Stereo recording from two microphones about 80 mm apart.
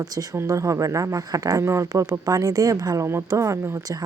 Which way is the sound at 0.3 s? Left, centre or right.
Right.